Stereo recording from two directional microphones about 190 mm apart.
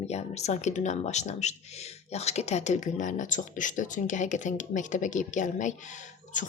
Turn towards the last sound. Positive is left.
turn(degrees=40)  # may be behind; listen again after turning